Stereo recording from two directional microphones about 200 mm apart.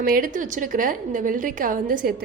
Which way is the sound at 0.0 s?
45° right (ahead or behind).